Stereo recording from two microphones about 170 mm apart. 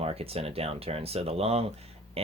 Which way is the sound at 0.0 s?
35° right (ahead or behind).